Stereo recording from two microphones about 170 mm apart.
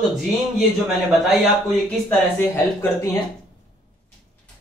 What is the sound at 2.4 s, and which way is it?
Speech, 15° left (ahead or behind).